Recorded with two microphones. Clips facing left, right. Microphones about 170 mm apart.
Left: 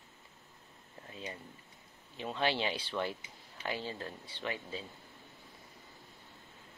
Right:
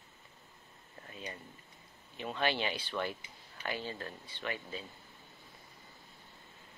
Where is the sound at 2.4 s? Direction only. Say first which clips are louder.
Left 1 dB; 25° left (ahead or behind).